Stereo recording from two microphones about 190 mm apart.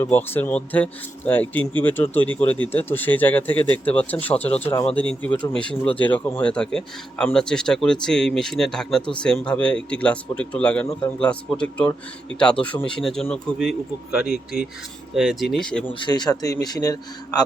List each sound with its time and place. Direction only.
0.0 s speech: 10° left (ahead or behind)
15.9 s a man's voice: 25° left (ahead or behind)